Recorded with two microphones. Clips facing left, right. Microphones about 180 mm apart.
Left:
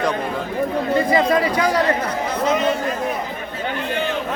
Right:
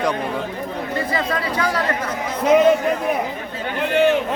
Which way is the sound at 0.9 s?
15° left (ahead or behind).